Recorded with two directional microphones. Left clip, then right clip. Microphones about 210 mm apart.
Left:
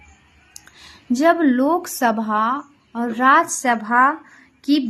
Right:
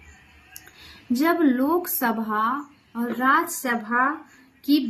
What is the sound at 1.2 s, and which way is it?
A woman's voice, 40° left (ahead or behind).